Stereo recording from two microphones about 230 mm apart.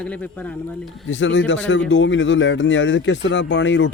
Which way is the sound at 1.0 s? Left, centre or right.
Left.